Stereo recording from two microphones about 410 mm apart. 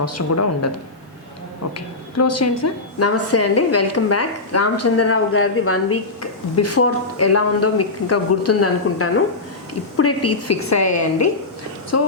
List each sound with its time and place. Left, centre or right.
0.0 s a woman's voice: left
2.1 s a woman's voice: left